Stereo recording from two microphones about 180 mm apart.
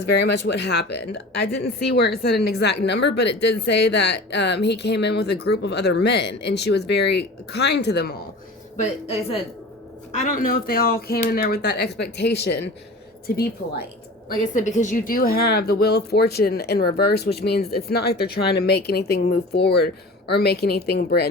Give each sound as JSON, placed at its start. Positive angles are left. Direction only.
{"t": 0.2, "sound": "speech", "side_deg": 70}
{"t": 8.7, "sound": "a woman's voice", "side_deg": 40}
{"t": 14.3, "sound": "speech", "side_deg": 45}